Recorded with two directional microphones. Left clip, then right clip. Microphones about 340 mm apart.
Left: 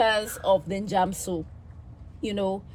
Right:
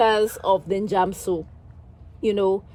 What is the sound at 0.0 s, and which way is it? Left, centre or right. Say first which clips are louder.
Speech: right 4 dB; right.